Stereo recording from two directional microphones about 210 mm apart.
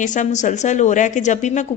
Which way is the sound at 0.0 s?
35° left (ahead or behind).